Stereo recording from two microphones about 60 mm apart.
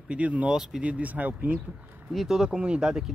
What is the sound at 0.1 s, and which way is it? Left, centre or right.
Speech, right.